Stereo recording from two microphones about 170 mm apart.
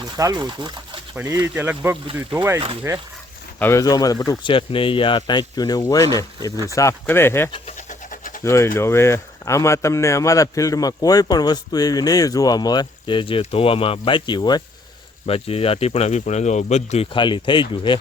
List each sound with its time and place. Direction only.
0.0 s speech: 20° right (ahead or behind)
1.1 s speech: 10° right (ahead or behind)
3.6 s speech: 15° left (ahead or behind)
7.8 s a sound: 50° left (ahead or behind)
8.4 s speech: 15° left (ahead or behind); by 17.1 s 40° left (ahead or behind)
17.2 s speech: 30° left (ahead or behind)